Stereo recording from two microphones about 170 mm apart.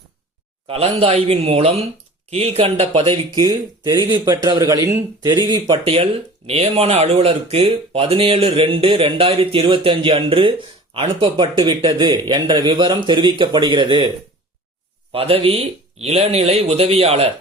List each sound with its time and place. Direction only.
0.7 s a man's voice: 35° right (ahead or behind)
15.1 s speech: 35° right (ahead or behind)